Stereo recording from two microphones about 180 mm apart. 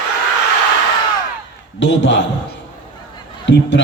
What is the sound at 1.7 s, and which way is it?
Speech, 90° left.